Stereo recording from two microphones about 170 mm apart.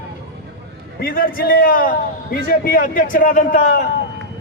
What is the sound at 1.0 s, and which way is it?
A man's voice, 60° left (ahead or behind).